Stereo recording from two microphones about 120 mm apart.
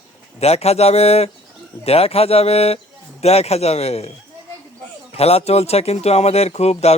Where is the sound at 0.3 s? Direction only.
60° left (ahead or behind).